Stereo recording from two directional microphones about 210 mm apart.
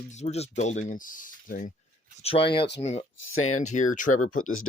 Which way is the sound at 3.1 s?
70° left (ahead or behind).